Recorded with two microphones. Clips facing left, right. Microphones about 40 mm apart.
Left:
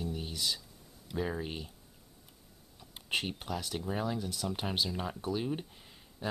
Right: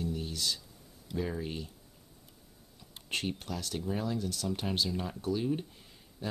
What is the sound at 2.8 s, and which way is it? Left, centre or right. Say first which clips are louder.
Speech: left 1 dB; centre.